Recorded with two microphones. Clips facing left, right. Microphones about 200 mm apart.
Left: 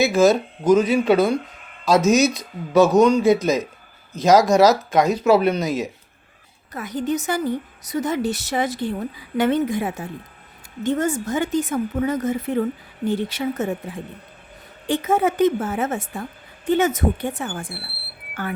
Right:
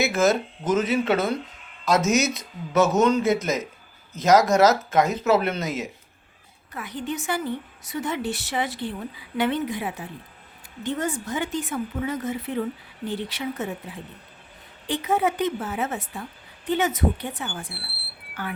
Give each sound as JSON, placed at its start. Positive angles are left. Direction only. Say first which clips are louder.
{"t": 0.1, "sound": "speech", "louder": "left 5 dB", "side_deg": 15}
{"t": 2.0, "sound": "speech", "louder": "left 6 dB", "side_deg": -20}
{"t": 2.8, "sound": "speech", "louder": "left 4 dB", "side_deg": 15}
{"t": 3.2, "sound": "speech", "louder": "left 6 dB", "side_deg": -20}
{"t": 4.1, "sound": "speech", "louder": "left 3 dB", "side_deg": 15}
{"t": 6.7, "sound": "a woman's voice", "louder": "left 7 dB", "side_deg": 40}